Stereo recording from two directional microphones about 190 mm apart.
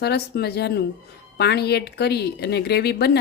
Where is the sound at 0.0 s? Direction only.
60° left (ahead or behind).